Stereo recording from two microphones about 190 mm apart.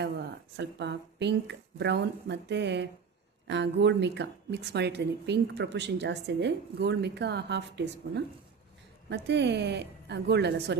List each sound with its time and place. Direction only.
0.0 s a woman's voice: 65° right (ahead or behind)